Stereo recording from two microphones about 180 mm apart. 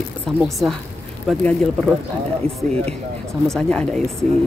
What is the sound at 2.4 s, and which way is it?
Speech, 30° right (ahead or behind).